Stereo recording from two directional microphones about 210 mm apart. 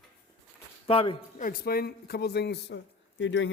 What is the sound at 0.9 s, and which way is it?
Speech, 25° left (ahead or behind).